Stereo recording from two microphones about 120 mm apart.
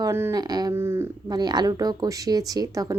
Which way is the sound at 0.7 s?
20° right (ahead or behind).